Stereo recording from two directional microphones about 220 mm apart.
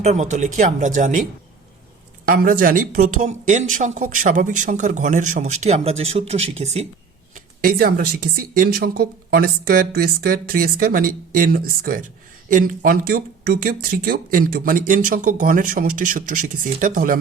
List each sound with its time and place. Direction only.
0.0 s speech: 35° right (ahead or behind)
7.3 s speech: 45° right (ahead or behind)